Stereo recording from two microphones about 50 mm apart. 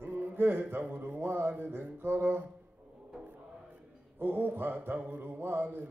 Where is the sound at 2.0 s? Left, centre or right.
Right.